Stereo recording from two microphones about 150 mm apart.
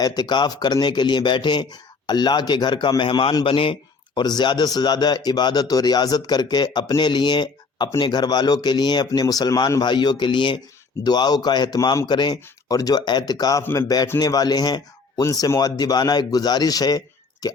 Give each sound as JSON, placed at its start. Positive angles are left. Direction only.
{"t": 0.0, "sound": "speech", "side_deg": 25}
{"t": 17.4, "sound": "plop", "side_deg": 25}